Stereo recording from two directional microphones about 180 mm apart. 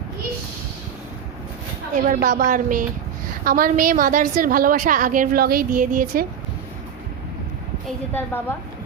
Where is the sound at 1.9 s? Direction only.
50° right (ahead or behind).